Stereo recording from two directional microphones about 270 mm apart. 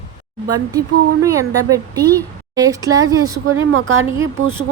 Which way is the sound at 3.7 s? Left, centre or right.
Right.